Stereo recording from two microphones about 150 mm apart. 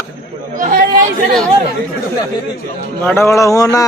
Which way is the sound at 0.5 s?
60° right (ahead or behind).